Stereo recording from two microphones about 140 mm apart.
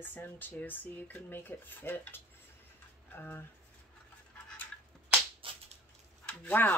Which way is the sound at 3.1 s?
15° left (ahead or behind).